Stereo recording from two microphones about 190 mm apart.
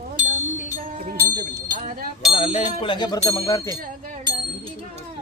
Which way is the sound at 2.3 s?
30° left (ahead or behind).